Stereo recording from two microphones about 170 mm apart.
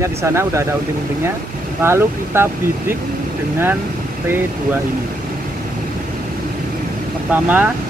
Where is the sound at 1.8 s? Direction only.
15° right (ahead or behind).